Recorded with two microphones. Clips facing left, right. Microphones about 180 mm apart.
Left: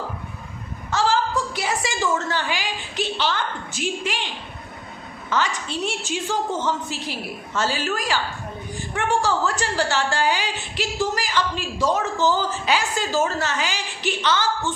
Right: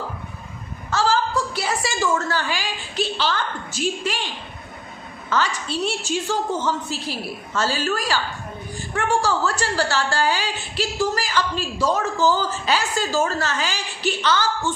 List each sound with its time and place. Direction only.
0.9 s a sound: 15° left (ahead or behind)
2.1 s a woman's voice: 15° left (ahead or behind)
5.3 s a woman's voice: 15° left (ahead or behind)